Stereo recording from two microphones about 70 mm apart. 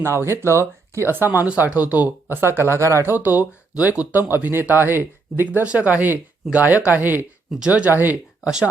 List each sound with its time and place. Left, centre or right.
0.0 s speech: right
1.5 s speech: right
5.5 s speech: centre
7.6 s speech: centre
7.9 s speech: right